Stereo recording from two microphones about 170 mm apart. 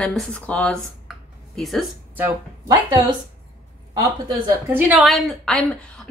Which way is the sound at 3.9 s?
20° right (ahead or behind).